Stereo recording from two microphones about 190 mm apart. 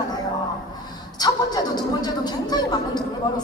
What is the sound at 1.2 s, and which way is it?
Speech, 20° left (ahead or behind).